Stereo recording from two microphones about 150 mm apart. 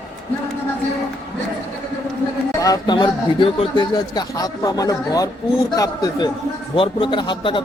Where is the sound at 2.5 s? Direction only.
25° left (ahead or behind).